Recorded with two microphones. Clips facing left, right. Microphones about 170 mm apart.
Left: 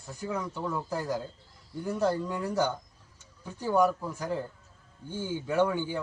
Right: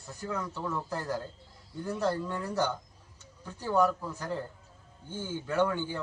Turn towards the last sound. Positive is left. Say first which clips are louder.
# left 2 dB
turn(degrees=15)  # may be behind; listen again after turning